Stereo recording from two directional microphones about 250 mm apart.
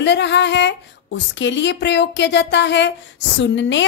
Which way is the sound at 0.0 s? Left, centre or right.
Left.